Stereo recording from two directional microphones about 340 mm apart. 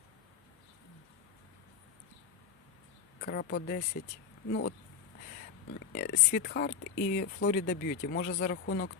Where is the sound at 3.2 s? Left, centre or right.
Left.